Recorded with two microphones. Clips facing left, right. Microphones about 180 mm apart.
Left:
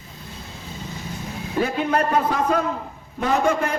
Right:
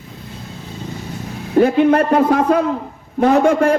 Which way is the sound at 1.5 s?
55° right (ahead or behind).